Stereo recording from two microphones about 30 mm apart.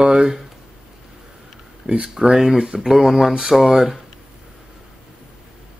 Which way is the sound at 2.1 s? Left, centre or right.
Centre.